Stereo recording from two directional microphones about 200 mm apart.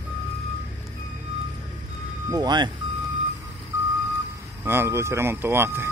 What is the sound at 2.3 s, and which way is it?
Speech, 20° right (ahead or behind).